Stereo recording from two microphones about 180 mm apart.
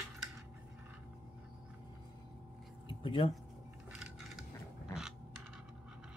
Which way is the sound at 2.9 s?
30° left (ahead or behind).